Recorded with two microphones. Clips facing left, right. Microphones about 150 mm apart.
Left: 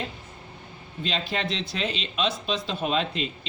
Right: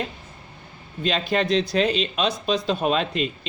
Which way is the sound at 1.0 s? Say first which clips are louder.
Right 7 dB; 50° right (ahead or behind).